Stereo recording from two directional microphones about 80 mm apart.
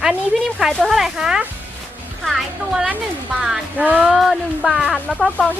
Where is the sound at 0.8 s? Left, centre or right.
Centre.